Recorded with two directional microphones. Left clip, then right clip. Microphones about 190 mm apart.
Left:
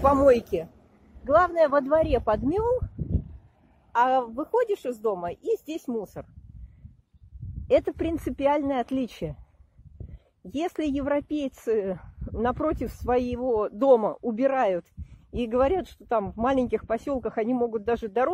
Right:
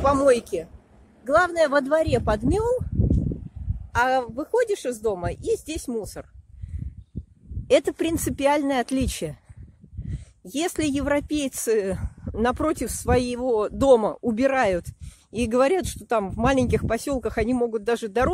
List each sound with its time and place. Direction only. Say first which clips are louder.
0.0 s speech: even; 5° right (ahead or behind)
3.9 s speech: right 1 dB; 10° right (ahead or behind)
7.7 s speech: right 3 dB; 30° right (ahead or behind)
10.4 s speech: right 3 dB; 20° right (ahead or behind)